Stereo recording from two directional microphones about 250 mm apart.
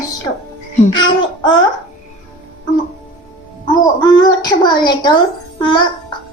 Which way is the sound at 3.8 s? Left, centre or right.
Centre.